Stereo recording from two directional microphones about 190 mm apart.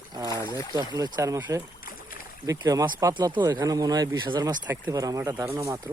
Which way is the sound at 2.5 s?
20° right (ahead or behind).